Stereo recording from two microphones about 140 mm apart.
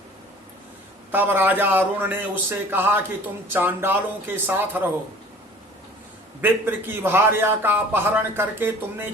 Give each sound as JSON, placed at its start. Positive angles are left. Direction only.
{"t": 1.1, "sound": "a man's voice", "side_deg": -15}
{"t": 6.4, "sound": "a man's voice", "side_deg": -15}